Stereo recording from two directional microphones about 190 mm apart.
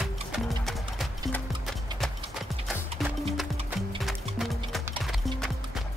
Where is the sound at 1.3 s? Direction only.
Centre (ahead or behind).